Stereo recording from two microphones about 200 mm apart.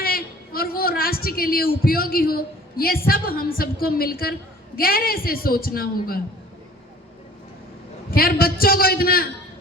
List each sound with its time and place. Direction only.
0.0 s a woman's voice: 45° left (ahead or behind)
8.1 s a man's voice: 50° left (ahead or behind)